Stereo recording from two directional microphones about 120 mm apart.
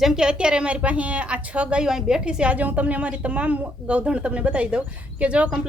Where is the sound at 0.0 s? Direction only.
5° right (ahead or behind).